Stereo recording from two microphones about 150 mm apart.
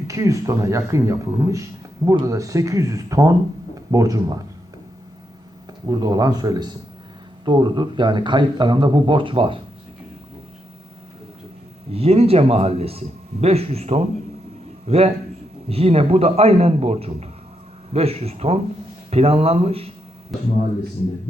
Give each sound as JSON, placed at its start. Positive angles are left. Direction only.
{"t": 0.1, "sound": "speech", "side_deg": -20}
{"t": 5.8, "sound": "speech", "side_deg": -25}
{"t": 11.9, "sound": "a man's voice", "side_deg": -40}